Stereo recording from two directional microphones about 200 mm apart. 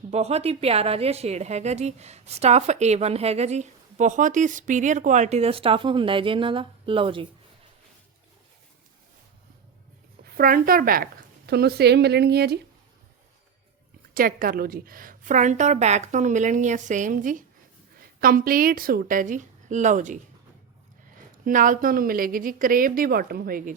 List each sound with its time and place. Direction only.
0.1 s a woman's voice: 30° right (ahead or behind)
10.2 s speech: 45° right (ahead or behind)
14.1 s a woman's voice: 45° right (ahead or behind)
21.4 s speech: 40° right (ahead or behind)